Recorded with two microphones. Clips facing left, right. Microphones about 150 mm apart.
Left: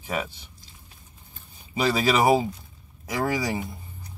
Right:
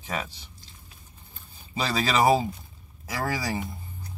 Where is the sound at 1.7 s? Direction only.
15° left (ahead or behind).